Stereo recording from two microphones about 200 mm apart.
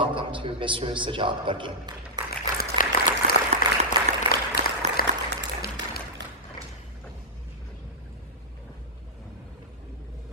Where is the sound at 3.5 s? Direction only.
35° right (ahead or behind).